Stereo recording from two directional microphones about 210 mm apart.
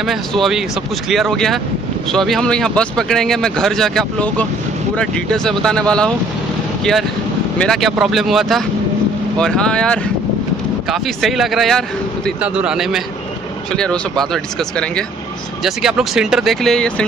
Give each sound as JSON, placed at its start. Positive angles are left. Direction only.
{"t": 0.0, "sound": "speech", "side_deg": 0}